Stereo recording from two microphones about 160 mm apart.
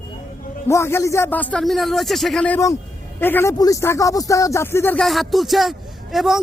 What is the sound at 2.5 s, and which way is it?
Speech, 20° left (ahead or behind).